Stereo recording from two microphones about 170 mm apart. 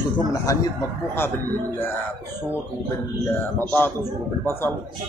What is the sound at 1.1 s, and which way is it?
Speech, 10° left (ahead or behind).